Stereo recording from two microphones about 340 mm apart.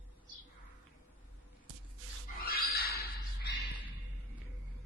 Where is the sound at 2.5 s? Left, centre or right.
Left.